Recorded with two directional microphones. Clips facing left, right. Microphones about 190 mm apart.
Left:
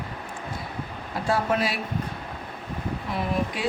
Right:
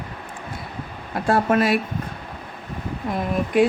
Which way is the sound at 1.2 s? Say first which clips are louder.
Right 6 dB; 55° right (ahead or behind).